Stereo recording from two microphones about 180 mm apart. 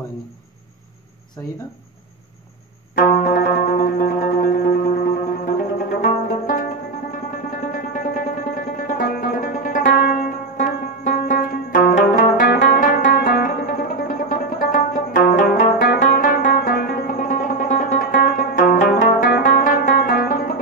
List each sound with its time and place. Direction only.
1.4 s speech: 15° left (ahead or behind)
3.0 s music: 50° left (ahead or behind)
7.7 s music: 50° left (ahead or behind)